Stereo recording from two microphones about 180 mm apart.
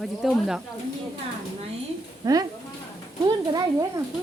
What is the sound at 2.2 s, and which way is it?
Speech, 20° right (ahead or behind).